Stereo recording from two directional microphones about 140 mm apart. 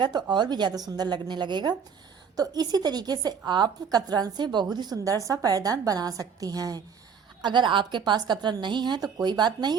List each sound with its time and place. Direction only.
0.0 s a woman's voice: 30° right (ahead or behind)